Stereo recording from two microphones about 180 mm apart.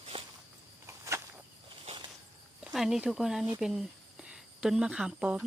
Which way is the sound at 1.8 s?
30° right (ahead or behind).